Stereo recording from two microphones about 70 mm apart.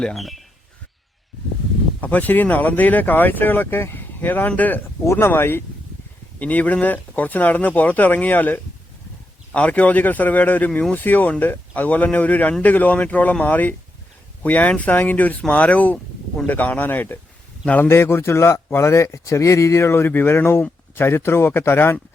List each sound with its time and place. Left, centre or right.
0.0 s speech: centre
2.0 s speech: left